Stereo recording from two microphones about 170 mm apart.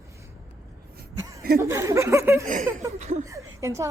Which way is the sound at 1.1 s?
20° right (ahead or behind).